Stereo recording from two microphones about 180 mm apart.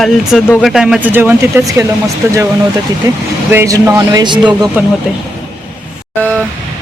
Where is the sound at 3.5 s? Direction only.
15° right (ahead or behind).